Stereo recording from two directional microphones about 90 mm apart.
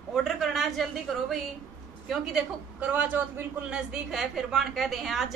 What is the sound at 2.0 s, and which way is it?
A woman's voice, 10° right (ahead or behind).